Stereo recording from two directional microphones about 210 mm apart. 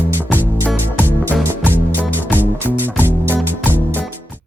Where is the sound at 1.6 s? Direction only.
10° left (ahead or behind).